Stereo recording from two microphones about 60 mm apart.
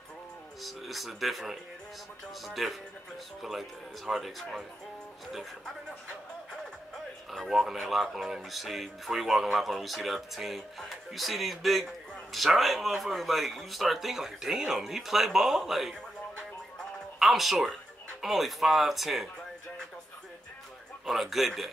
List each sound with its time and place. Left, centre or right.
0.6 s speech: centre
7.2 s speech: centre
17.2 s speech: centre
21.0 s speech: centre